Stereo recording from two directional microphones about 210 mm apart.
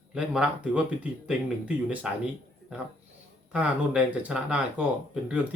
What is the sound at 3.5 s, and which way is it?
Speech, 5° right (ahead or behind).